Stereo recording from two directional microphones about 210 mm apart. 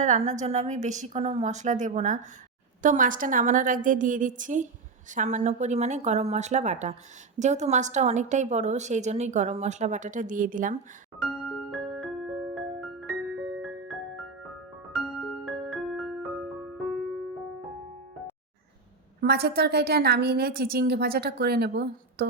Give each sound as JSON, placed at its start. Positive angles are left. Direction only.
{"t": 0.0, "sound": "a woman's voice", "side_deg": -35}
{"t": 11.2, "sound": "music", "side_deg": 0}
{"t": 19.2, "sound": "a woman's voice", "side_deg": -50}